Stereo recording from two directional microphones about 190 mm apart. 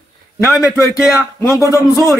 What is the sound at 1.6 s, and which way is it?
Speech, 20° right (ahead or behind).